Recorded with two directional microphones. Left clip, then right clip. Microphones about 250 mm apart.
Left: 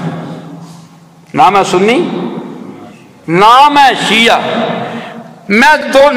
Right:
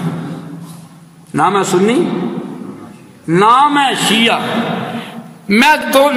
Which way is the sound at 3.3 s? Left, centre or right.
Right.